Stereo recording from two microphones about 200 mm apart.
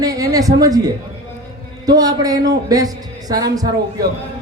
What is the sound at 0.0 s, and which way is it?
Speech, 20° right (ahead or behind).